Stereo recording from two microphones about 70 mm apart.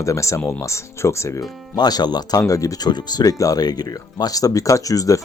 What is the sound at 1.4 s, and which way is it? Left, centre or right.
Speech, left.